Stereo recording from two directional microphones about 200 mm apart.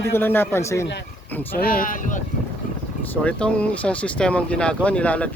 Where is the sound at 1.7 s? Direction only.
45° left (ahead or behind).